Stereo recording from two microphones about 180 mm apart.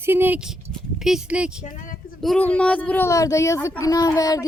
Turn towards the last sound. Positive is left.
turn(degrees=20)  # may be behind; listen again after turning